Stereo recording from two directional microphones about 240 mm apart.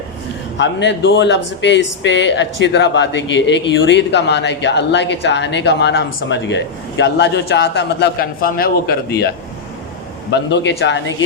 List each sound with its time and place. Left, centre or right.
0.6 s speech: left
10.3 s speech: left